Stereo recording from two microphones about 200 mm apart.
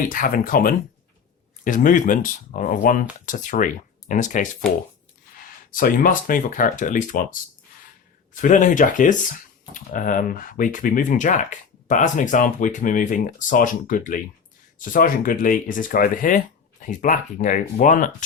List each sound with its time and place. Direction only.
0.1 s speech: 45° left (ahead or behind)
5.7 s speech: 45° left (ahead or behind)
8.4 s speech: 40° left (ahead or behind)